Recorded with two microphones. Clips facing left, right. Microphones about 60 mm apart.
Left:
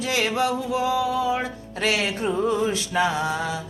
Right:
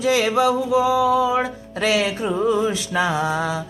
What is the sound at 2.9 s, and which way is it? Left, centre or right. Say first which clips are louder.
Music: right 2 dB; centre.